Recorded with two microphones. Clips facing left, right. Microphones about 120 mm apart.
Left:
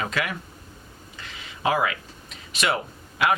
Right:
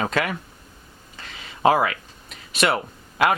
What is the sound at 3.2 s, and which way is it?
Speech, 45° right (ahead or behind).